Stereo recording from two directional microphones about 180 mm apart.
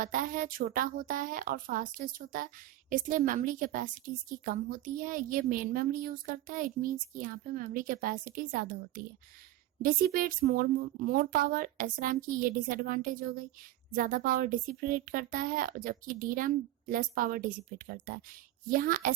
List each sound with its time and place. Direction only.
0.0 s a woman's voice: 50° right (ahead or behind)